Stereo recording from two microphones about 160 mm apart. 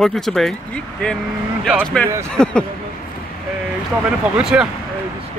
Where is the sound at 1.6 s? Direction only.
5° left (ahead or behind).